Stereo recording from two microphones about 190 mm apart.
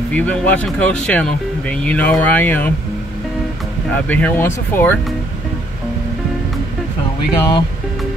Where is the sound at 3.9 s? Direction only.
10° left (ahead or behind).